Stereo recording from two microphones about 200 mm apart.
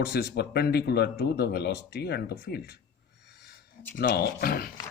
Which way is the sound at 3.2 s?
55° left (ahead or behind).